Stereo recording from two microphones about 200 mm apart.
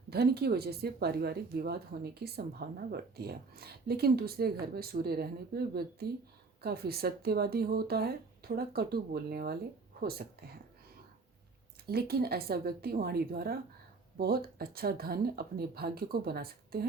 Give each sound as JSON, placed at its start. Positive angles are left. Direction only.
{"t": 0.1, "sound": "a woman's voice", "side_deg": -50}
{"t": 11.9, "sound": "a woman's voice", "side_deg": -50}